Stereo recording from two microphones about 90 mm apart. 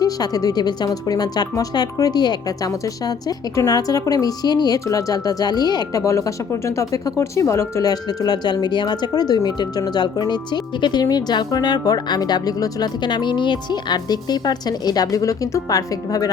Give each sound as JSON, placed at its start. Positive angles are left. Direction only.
{"t": 0.0, "sound": "a woman's voice", "side_deg": 45}